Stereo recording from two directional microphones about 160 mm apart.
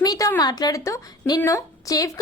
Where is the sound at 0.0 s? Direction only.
20° left (ahead or behind).